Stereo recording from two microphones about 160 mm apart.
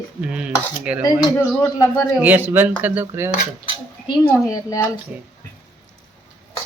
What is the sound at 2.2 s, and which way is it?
Speech, 10° right (ahead or behind).